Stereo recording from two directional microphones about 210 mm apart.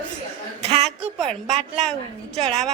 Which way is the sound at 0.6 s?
30° right (ahead or behind).